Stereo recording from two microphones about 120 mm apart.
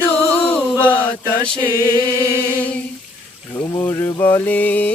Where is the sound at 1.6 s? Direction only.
25° right (ahead or behind).